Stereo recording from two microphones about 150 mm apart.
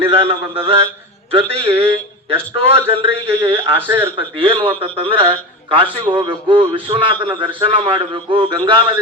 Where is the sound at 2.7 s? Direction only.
15° right (ahead or behind).